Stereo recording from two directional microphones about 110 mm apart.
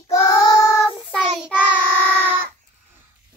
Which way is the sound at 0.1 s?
35° left (ahead or behind).